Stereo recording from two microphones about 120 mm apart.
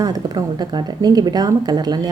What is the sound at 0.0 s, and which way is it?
A woman's voice, 35° right (ahead or behind).